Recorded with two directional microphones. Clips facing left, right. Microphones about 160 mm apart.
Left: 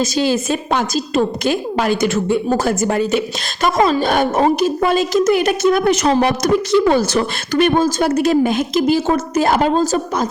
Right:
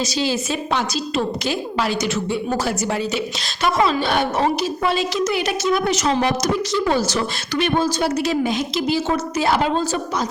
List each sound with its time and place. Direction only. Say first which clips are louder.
0.0 s a woman's voice: left 5 dB; 50° left (ahead or behind)